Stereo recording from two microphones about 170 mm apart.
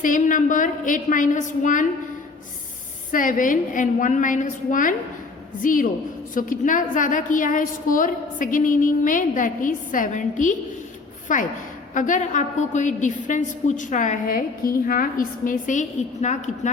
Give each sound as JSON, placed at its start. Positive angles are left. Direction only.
{"t": 0.0, "sound": "a woman's voice", "side_deg": 50}
{"t": 3.1, "sound": "a woman's voice", "side_deg": 50}